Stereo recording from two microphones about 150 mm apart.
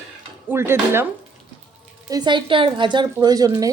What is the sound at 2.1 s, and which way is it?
A woman's voice, 30° right (ahead or behind).